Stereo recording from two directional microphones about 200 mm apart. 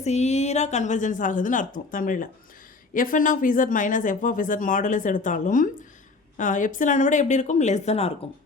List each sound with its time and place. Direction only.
0.0 s speech: 35° left (ahead or behind)